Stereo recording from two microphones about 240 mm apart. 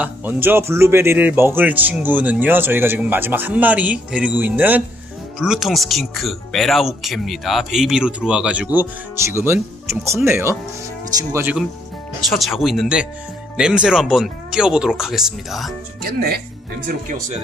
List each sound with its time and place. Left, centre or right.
0.0 s speech: centre
16.0 s speech: right